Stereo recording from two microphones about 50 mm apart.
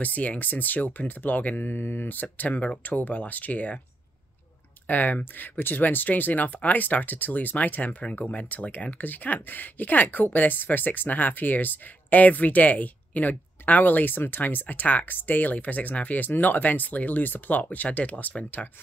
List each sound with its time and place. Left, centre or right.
0.0 s speech: left
4.8 s speech: left